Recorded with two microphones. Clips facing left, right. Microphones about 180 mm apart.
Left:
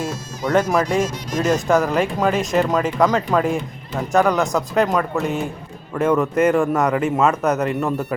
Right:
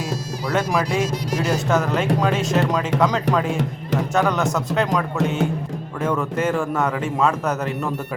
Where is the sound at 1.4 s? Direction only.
5° right (ahead or behind).